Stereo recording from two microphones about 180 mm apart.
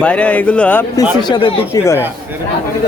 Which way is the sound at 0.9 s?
25° left (ahead or behind).